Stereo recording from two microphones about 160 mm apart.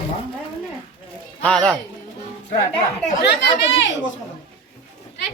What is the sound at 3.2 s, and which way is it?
Speech, 90° left.